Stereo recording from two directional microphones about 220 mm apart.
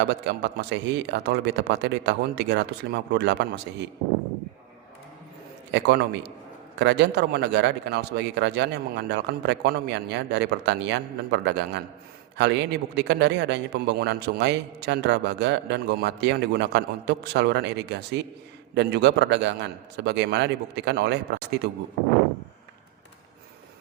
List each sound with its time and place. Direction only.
0.0 s a man's voice: 50° right (ahead or behind)
5.7 s a man's voice: 50° right (ahead or behind)